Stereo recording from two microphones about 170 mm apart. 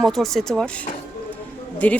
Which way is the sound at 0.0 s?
Centre (ahead or behind).